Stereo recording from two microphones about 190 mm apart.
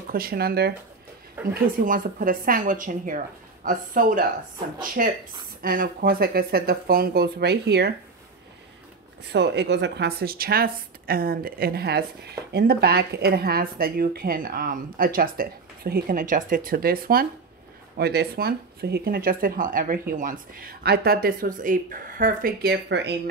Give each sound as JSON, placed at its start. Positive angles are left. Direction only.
{"t": 0.1, "sound": "speech", "side_deg": -50}
{"t": 1.5, "sound": "speech", "side_deg": -45}
{"t": 9.2, "sound": "speech", "side_deg": -65}